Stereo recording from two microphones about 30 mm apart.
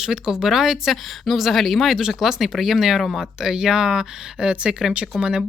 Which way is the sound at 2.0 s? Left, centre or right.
Right.